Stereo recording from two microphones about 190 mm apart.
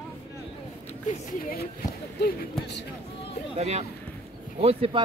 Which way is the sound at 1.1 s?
40° left (ahead or behind).